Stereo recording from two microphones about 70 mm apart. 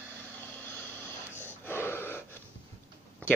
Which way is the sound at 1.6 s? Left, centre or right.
Left.